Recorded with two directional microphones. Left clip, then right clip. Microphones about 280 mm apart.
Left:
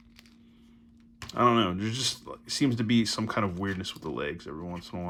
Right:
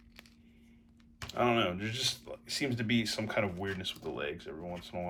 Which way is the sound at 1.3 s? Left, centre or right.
Centre.